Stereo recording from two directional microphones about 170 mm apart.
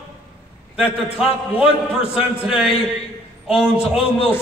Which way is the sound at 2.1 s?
5° right (ahead or behind).